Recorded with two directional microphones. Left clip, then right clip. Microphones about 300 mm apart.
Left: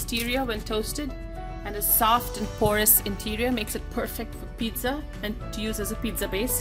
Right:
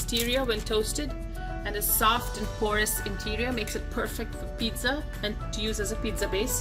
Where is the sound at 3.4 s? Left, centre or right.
Left.